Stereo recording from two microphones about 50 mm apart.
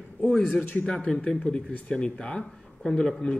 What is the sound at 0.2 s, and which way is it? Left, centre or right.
Speech, centre.